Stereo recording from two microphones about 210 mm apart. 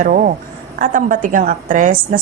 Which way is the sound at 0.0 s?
40° right (ahead or behind).